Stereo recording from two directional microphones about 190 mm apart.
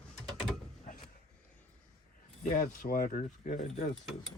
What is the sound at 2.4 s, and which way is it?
Rub, 45° left (ahead or behind).